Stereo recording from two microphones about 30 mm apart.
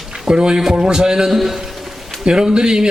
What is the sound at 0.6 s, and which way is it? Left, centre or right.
Speech, centre.